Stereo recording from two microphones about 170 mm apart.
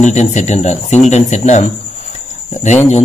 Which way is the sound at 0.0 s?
45° left (ahead or behind).